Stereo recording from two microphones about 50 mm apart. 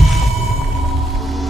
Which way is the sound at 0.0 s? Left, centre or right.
Centre.